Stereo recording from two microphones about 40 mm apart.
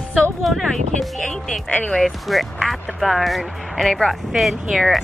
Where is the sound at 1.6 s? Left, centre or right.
Left.